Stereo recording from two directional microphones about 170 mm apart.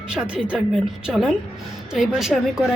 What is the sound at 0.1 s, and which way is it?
A woman's voice, 5° right (ahead or behind).